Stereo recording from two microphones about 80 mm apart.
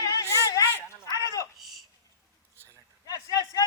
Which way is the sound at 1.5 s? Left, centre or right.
Centre.